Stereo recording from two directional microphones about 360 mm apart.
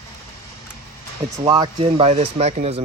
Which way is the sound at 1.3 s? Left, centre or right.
Centre.